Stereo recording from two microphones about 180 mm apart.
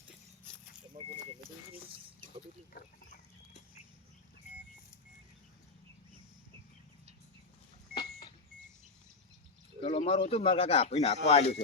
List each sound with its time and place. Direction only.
9.8 s speech: 30° left (ahead or behind)